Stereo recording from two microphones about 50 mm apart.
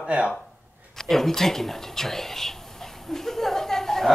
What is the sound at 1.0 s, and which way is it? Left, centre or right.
Speech, centre.